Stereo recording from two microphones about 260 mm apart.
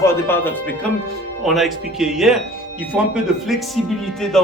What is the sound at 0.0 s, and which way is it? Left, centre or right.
Speech, centre.